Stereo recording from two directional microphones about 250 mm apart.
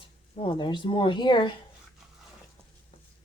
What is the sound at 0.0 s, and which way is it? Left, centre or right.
Speech, left.